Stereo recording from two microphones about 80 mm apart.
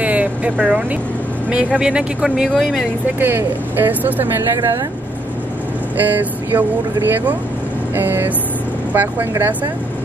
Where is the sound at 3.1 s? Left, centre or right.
Right.